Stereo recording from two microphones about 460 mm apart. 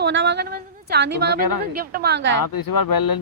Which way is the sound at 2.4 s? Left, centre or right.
Left.